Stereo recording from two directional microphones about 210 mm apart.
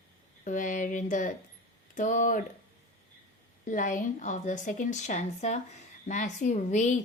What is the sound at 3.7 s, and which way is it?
Speech, 40° left (ahead or behind).